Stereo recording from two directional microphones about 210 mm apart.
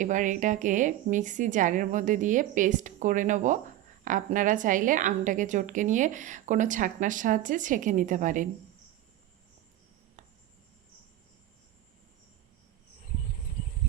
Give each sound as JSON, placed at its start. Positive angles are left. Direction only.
{"t": 0.0, "sound": "a woman's voice", "side_deg": -35}